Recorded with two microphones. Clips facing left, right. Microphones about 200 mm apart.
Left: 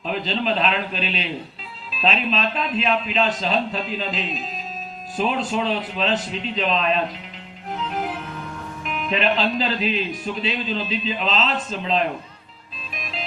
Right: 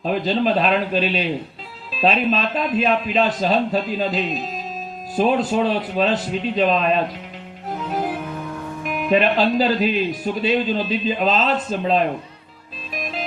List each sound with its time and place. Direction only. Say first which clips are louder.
0.0 s speech: right 5 dB; 45° right (ahead or behind)
9.0 s speech: right 5 dB; 50° right (ahead or behind)